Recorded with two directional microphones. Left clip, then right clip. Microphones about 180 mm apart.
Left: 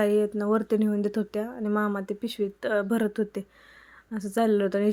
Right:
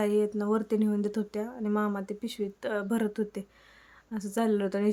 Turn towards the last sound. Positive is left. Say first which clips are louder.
# left 5 dB
turn(degrees=15)  # may be behind; listen again after turning